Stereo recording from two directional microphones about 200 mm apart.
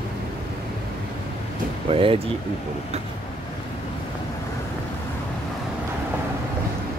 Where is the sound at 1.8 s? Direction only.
25° right (ahead or behind).